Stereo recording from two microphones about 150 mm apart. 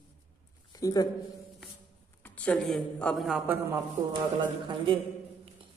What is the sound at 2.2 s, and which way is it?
Speech, 10° left (ahead or behind).